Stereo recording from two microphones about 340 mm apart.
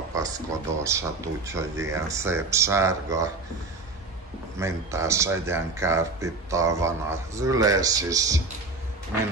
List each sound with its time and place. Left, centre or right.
0.1 s speech: centre
4.6 s speech: centre